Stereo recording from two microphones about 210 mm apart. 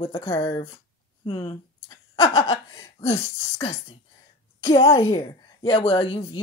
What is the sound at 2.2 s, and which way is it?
A woman's voice, 25° left (ahead or behind).